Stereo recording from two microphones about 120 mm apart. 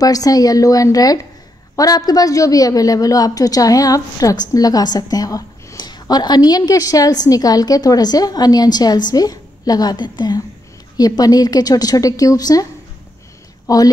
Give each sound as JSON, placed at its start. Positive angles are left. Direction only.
{"t": 0.0, "sound": "a woman's voice", "side_deg": 30}
{"t": 13.7, "sound": "a woman's voice", "side_deg": 30}